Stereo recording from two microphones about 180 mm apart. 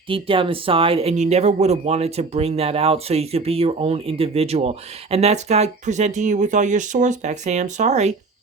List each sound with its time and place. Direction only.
0.1 s speech: 30° right (ahead or behind)